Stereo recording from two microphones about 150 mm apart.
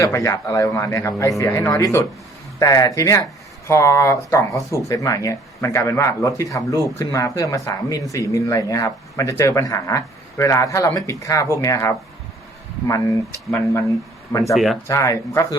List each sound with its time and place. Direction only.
0.0 s speech: 20° left (ahead or behind)
14.5 s speech: centre (ahead or behind)
14.8 s speech: 20° left (ahead or behind)